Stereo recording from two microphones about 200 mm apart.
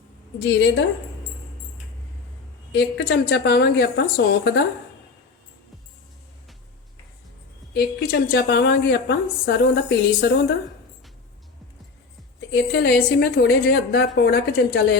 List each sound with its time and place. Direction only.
0.3 s a woman's voice: 60° left (ahead or behind)
2.7 s a woman's voice: 55° left (ahead or behind)
7.7 s a woman's voice: 50° left (ahead or behind)
12.5 s a woman's voice: 55° left (ahead or behind)